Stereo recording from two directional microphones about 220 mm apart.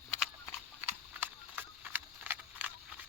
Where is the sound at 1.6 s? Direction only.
10° right (ahead or behind).